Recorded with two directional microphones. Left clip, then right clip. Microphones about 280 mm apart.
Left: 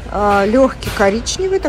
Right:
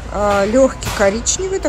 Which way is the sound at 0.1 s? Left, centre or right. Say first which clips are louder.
Left 1 dB; centre.